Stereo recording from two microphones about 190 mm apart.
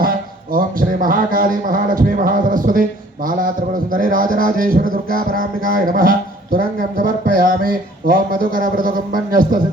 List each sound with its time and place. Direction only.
0.0 s a man's voice: 50° right (ahead or behind)
3.9 s music: 45° right (ahead or behind)